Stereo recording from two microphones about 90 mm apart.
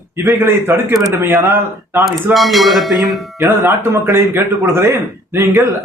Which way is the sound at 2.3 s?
Centre (ahead or behind).